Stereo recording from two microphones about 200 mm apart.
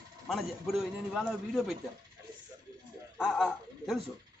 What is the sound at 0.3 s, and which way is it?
A man's voice, centre (ahead or behind).